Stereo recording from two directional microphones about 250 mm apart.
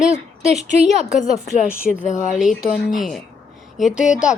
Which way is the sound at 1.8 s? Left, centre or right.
Left.